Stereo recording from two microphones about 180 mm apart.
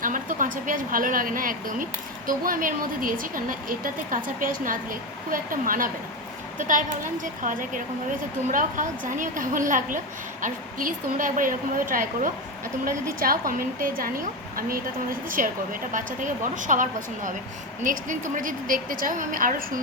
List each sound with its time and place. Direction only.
0.0 s a woman's voice: 50° right (ahead or behind)